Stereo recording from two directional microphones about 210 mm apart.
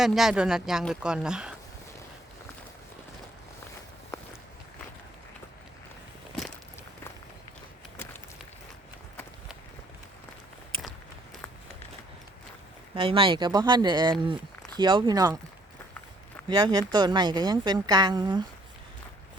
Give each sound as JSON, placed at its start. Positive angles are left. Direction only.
{"t": 0.0, "sound": "speech", "side_deg": 0}
{"t": 10.7, "sound": "walk", "side_deg": -25}
{"t": 12.9, "sound": "a woman's voice", "side_deg": -25}
{"t": 16.5, "sound": "a woman's voice", "side_deg": -20}